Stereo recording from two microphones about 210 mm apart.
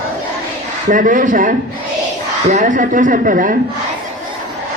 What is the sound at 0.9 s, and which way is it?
A man's voice, 40° right (ahead or behind).